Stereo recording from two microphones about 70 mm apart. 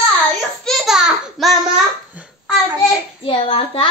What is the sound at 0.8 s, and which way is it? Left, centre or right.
Speech, centre.